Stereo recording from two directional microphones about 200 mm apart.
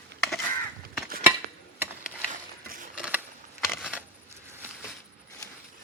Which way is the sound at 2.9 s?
5° right (ahead or behind).